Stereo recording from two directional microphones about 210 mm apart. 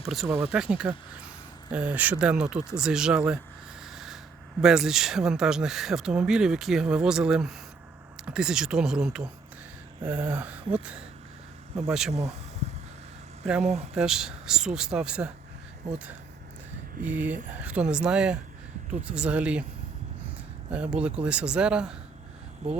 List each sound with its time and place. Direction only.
0.0 s speech: centre (ahead or behind)
3.8 s rub: centre (ahead or behind)
4.6 s speech: centre (ahead or behind)
11.9 s speech: centre (ahead or behind)
13.6 s speech: 35° right (ahead or behind)
13.9 s speech: 5° right (ahead or behind)
15.9 s speech: 35° right (ahead or behind)
17.0 s speech: 5° right (ahead or behind)
20.7 s speech: 5° right (ahead or behind)